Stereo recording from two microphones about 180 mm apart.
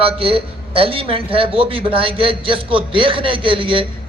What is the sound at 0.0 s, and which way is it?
A man's voice, 30° right (ahead or behind).